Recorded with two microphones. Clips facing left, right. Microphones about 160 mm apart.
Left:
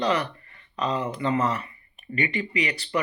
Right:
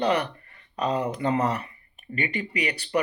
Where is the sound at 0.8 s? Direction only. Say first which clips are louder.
Right 1 dB; 60° right (ahead or behind).